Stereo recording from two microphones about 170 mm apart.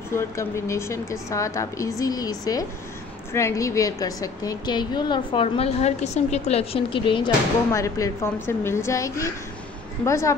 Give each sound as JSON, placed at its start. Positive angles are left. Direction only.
{"t": 0.1, "sound": "a woman's voice", "side_deg": 15}
{"t": 7.7, "sound": "a woman's voice", "side_deg": 15}